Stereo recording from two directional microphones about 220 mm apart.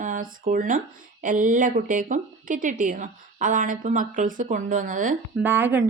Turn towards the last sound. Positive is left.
turn(degrees=-10)  # may be behind; listen again after turning